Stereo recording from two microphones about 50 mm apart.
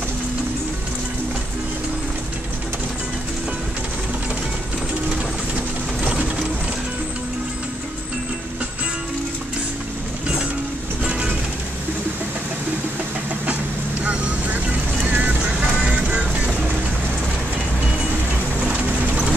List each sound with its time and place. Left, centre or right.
6.0 s coin: right
11.1 s vehicle: right
14.0 s vehicle: right
15.1 s music: right